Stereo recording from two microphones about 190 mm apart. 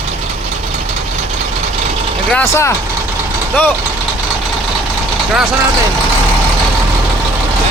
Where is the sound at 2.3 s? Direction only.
15° left (ahead or behind).